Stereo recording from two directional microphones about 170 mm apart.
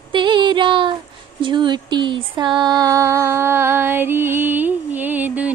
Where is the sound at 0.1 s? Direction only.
30° right (ahead or behind).